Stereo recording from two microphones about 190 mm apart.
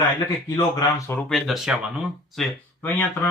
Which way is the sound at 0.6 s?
20° left (ahead or behind).